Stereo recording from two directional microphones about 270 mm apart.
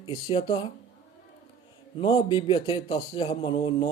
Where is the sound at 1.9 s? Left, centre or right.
Centre.